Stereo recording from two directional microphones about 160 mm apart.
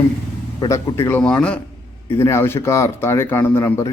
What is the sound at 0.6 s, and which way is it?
Speech, 25° left (ahead or behind).